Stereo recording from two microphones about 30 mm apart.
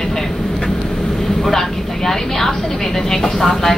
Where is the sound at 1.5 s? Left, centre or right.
Centre.